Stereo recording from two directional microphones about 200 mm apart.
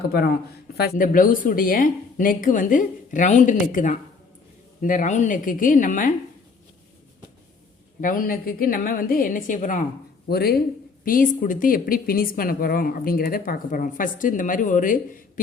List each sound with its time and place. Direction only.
0.1 s a woman's voice: 50° left (ahead or behind)
8.0 s speech: 45° left (ahead or behind)
10.2 s speech: 50° left (ahead or behind)